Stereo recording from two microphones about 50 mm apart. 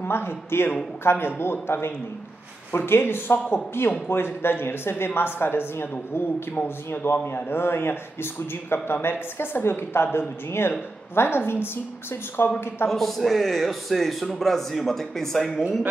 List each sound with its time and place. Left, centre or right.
0.0 s speech: left
12.8 s a man's voice: centre